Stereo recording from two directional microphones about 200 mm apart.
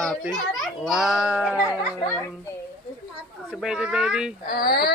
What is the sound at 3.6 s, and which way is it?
Speech, 5° right (ahead or behind).